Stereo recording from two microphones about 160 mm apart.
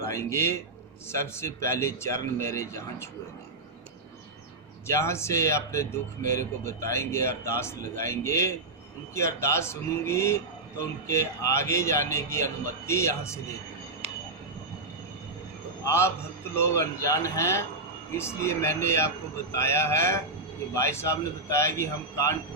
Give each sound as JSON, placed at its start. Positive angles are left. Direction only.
{"t": 0.0, "sound": "a man's voice", "side_deg": 15}
{"t": 4.9, "sound": "speech", "side_deg": 15}
{"t": 15.8, "sound": "speech", "side_deg": 15}